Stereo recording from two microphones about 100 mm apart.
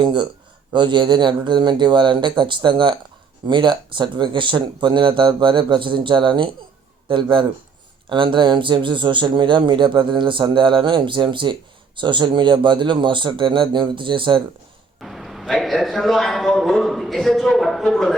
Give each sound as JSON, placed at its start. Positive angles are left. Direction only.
{"t": 0.0, "sound": "speech", "side_deg": -50}
{"t": 15.0, "sound": "a man's voice", "side_deg": 0}